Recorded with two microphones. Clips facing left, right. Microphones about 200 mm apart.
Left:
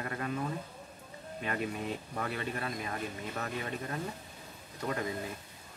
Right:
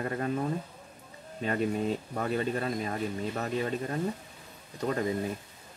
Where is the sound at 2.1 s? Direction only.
35° right (ahead or behind).